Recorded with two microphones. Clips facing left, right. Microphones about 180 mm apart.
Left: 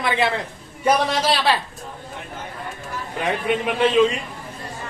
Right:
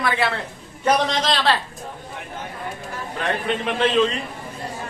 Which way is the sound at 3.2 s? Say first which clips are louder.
Left 2 dB; 10° left (ahead or behind).